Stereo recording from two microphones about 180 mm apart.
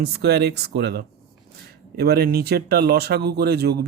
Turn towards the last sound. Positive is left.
turn(degrees=-65)  # may be behind; listen again after turning